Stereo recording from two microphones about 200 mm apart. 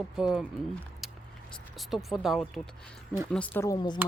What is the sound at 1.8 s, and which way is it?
Speech, centre (ahead or behind).